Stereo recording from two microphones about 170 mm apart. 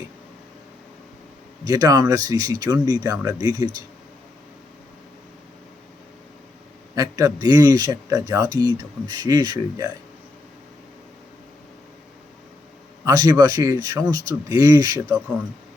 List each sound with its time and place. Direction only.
1.6 s speech: 20° right (ahead or behind)
6.9 s speech: 20° right (ahead or behind)
13.1 s speech: 20° right (ahead or behind)